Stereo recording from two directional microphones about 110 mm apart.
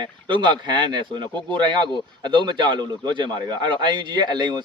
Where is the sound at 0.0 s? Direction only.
45° right (ahead or behind).